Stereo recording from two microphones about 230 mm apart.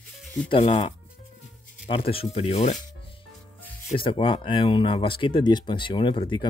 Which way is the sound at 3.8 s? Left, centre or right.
Left.